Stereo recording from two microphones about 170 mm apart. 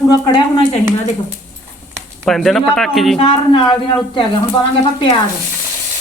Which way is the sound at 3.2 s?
30° left (ahead or behind).